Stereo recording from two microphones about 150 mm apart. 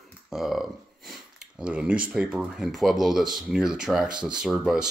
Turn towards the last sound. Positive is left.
turn(degrees=-5)  # may be behind; listen again after turning